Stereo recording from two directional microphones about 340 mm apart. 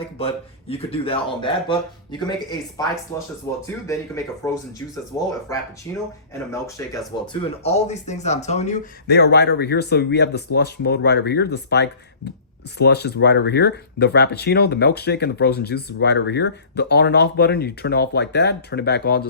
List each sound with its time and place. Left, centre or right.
0.2 s speech: centre
3.5 s speech: centre
7.6 s speech: centre